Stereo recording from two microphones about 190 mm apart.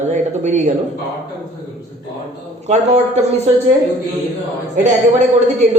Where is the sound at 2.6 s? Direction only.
35° right (ahead or behind).